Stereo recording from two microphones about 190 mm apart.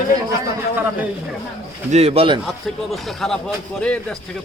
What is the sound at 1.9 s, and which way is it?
Speech, 30° right (ahead or behind).